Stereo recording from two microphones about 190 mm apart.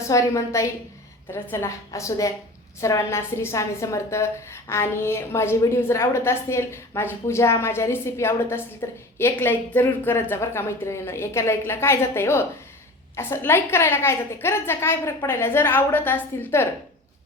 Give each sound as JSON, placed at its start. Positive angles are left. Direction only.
{"t": 0.0, "sound": "a woman's voice", "side_deg": 15}